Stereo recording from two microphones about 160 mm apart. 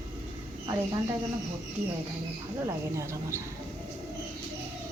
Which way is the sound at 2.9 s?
15° right (ahead or behind).